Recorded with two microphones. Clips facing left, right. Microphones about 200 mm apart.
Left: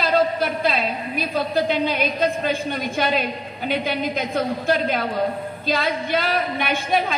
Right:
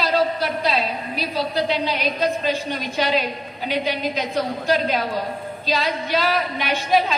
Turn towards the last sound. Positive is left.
turn(degrees=55)  # may be behind; listen again after turning